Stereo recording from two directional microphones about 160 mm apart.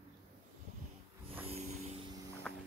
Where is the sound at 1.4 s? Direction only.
40° right (ahead or behind).